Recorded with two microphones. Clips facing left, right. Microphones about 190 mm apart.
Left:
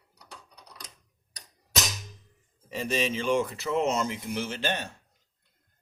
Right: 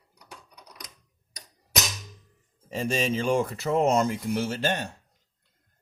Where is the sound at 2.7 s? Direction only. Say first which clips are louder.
Right 2 dB; 40° right (ahead or behind).